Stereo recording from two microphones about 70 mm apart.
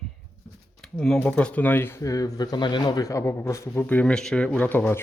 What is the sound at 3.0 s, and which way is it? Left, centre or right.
Speech, left.